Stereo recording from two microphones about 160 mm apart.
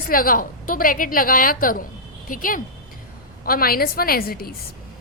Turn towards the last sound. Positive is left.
turn(degrees=70)  # may be behind; listen again after turning